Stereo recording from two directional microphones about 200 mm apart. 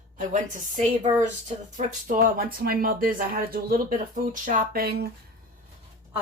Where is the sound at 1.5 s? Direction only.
40° right (ahead or behind).